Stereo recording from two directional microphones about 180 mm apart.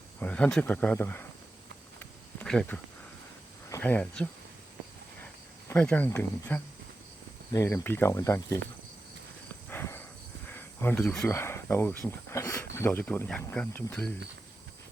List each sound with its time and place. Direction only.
0.2 s speech: 5° left (ahead or behind)
2.0 s a sound: 5° left (ahead or behind)
3.7 s speech: 10° left (ahead or behind)
9.6 s a sound: 15° left (ahead or behind)
10.5 s cricket: 10° left (ahead or behind)
11.3 s speech: 15° left (ahead or behind)